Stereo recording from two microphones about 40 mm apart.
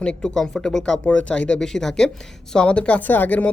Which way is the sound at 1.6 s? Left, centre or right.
Centre.